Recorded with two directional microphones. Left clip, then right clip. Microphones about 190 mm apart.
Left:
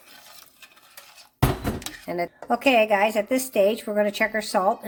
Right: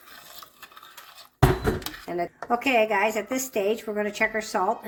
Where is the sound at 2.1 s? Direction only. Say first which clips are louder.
Left 1 dB; 50° left (ahead or behind).